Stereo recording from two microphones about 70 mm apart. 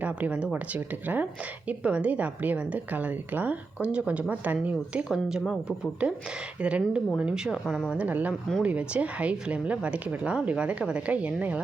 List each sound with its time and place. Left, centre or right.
0.0 s a woman's voice: centre
5.0 s speech: centre
7.9 s a woman's voice: right